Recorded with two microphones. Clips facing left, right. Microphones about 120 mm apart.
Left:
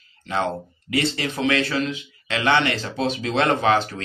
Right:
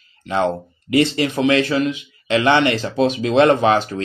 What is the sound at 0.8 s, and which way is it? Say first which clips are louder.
A man's voice: right 7 dB; 20° right (ahead or behind).